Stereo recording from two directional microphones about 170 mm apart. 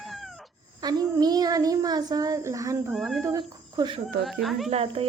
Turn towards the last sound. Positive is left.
turn(degrees=-35)  # may be behind; listen again after turning